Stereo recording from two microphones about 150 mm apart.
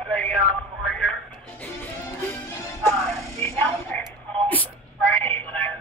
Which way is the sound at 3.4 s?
15° left (ahead or behind).